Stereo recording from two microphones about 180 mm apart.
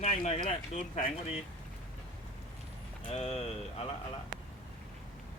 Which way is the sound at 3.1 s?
35° left (ahead or behind).